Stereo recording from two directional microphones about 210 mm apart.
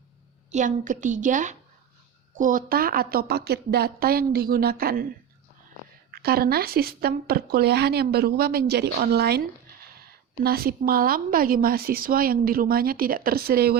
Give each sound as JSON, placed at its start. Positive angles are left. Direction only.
{"t": 0.5, "sound": "a woman's voice", "side_deg": -35}
{"t": 6.1, "sound": "speech", "side_deg": -45}
{"t": 10.4, "sound": "speech", "side_deg": -45}